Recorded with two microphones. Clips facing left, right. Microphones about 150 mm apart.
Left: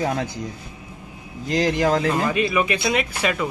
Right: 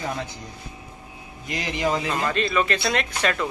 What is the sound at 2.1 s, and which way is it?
Speech, 10° left (ahead or behind).